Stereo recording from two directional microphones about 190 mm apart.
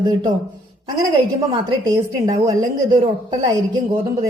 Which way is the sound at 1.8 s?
20° right (ahead or behind).